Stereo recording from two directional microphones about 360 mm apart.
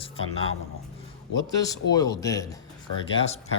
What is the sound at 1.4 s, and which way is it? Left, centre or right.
A man's voice, centre.